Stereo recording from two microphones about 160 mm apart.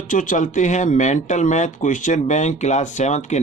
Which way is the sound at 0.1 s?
55° left (ahead or behind).